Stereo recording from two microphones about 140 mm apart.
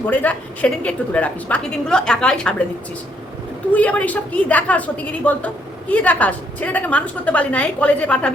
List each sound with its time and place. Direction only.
0.1 s a woman's voice: 10° left (ahead or behind)
3.7 s a woman's voice: 10° left (ahead or behind)